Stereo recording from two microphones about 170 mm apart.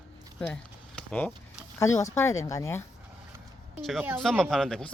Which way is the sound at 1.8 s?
15° left (ahead or behind).